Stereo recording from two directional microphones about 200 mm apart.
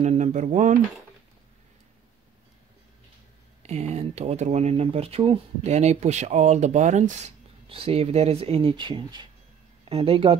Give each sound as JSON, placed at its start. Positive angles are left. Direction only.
{"t": 0.0, "sound": "speech", "side_deg": -35}
{"t": 3.6, "sound": "speech", "side_deg": -35}